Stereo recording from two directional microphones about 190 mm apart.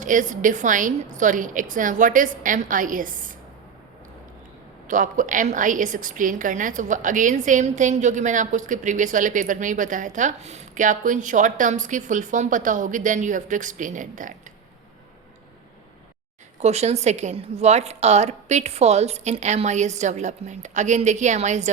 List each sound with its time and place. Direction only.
0.0 s a woman's voice: 40° right (ahead or behind)
4.9 s a woman's voice: 45° right (ahead or behind)
16.6 s a woman's voice: 35° right (ahead or behind)